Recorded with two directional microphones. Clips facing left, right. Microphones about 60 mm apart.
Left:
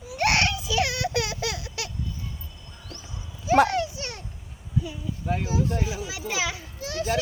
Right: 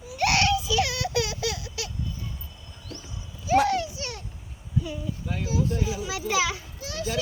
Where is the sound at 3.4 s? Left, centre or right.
Left.